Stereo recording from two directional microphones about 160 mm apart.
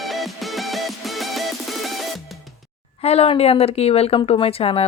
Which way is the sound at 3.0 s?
40° left (ahead or behind).